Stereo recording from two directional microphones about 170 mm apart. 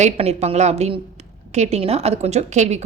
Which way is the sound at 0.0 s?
40° right (ahead or behind).